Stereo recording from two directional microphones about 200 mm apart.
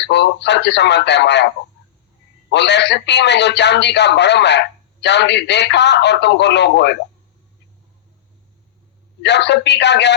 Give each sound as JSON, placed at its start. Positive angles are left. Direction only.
{"t": 0.0, "sound": "a man's voice", "side_deg": 60}
{"t": 2.5, "sound": "a man's voice", "side_deg": 60}
{"t": 9.2, "sound": "a man's voice", "side_deg": 60}